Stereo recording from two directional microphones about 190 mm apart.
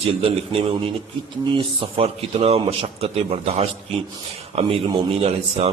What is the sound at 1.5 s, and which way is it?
Speech, 25° right (ahead or behind).